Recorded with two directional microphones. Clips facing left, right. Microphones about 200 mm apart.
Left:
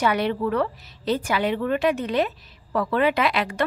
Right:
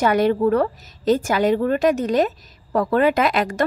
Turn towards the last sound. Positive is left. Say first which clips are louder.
# right 4 dB
turn(degrees=-45)  # may be behind; listen again after turning